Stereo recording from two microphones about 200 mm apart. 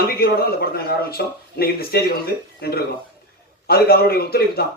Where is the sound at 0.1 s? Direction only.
50° left (ahead or behind).